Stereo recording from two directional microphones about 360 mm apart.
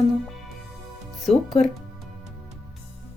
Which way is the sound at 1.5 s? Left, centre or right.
Centre.